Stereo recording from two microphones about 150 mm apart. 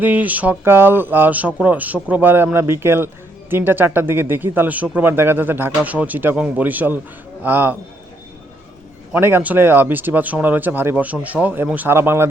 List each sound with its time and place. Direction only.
0.0 s speech: 10° right (ahead or behind)
9.1 s speech: 10° right (ahead or behind)